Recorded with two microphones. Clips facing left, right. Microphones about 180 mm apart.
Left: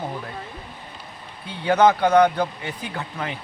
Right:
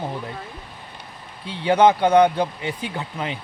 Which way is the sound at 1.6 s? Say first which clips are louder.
Right 1 dB; 30° right (ahead or behind).